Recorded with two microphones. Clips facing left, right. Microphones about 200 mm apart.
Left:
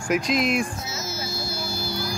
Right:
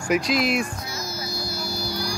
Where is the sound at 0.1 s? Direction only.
Centre (ahead or behind).